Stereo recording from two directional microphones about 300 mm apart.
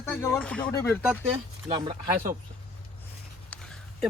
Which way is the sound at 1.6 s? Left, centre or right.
Centre.